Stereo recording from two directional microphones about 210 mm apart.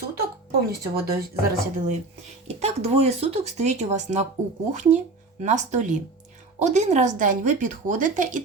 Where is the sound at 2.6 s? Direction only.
30° right (ahead or behind).